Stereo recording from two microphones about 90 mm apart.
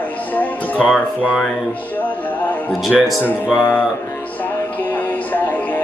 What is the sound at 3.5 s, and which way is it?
Speech, centre (ahead or behind).